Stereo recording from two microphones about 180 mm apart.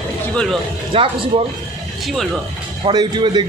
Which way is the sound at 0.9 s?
30° right (ahead or behind).